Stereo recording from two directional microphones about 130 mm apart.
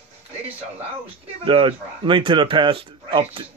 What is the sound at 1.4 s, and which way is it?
Speech, 40° right (ahead or behind).